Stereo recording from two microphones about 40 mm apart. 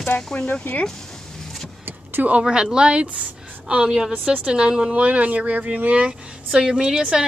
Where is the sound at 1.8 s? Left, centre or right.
Right.